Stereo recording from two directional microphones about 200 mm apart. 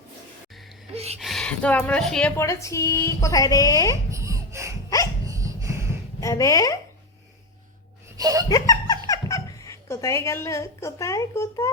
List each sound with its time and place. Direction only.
0.9 s a sound: 30° right (ahead or behind)
1.2 s a woman's voice: centre (ahead or behind); by 3.9 s 15° left (ahead or behind)
4.1 s a sound: 15° right (ahead or behind)
5.2 s dog: 15° right (ahead or behind)
6.1 s speech: 15° left (ahead or behind)
8.2 s laughter: 20° right (ahead or behind)
8.4 s laughter: 20° left (ahead or behind)
9.0 s a sound: 20° left (ahead or behind)
9.9 s a woman's voice: 15° left (ahead or behind)